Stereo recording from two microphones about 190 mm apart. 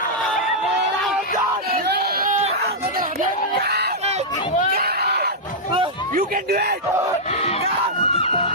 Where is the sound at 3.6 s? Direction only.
60° right (ahead or behind).